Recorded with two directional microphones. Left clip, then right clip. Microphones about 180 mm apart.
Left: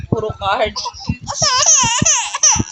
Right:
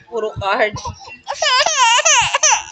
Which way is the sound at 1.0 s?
30° right (ahead or behind).